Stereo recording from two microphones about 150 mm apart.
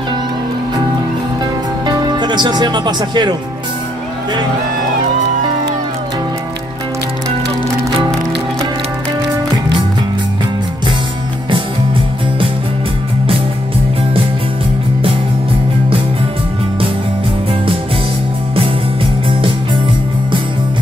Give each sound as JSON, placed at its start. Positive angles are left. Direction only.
{"t": 1.9, "sound": "speech", "side_deg": -30}